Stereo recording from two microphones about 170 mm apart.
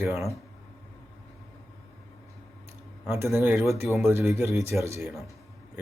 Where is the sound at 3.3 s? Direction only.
10° right (ahead or behind).